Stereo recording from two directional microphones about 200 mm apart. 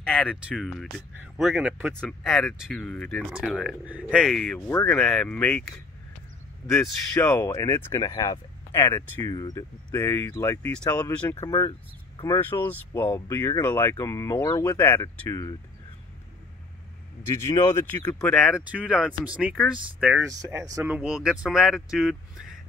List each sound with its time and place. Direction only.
0.0 s speech: 5° left (ahead or behind)
7.2 s speech: 15° left (ahead or behind)
17.5 s speech: 15° left (ahead or behind)
18.3 s speech: centre (ahead or behind)